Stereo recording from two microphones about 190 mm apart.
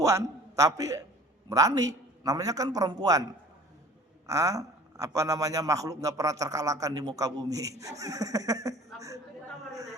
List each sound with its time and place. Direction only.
0.0 s a man's voice: 15° right (ahead or behind)
4.3 s a man's voice: 15° right (ahead or behind)